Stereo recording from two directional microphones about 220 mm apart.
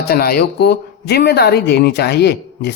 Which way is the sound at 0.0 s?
45° left (ahead or behind).